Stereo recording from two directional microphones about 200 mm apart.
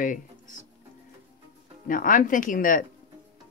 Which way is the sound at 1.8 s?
40° left (ahead or behind).